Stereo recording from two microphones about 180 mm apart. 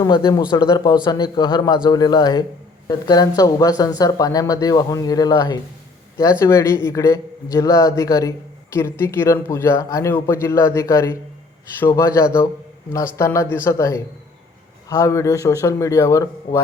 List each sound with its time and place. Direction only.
0.0 s speech: 25° left (ahead or behind)